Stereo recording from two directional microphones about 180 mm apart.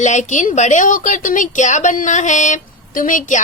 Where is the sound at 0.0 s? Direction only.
40° left (ahead or behind).